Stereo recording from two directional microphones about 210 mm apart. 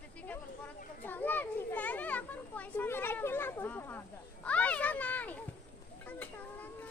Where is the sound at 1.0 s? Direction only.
10° left (ahead or behind).